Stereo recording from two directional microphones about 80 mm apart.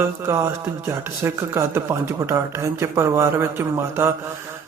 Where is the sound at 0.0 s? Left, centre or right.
Right.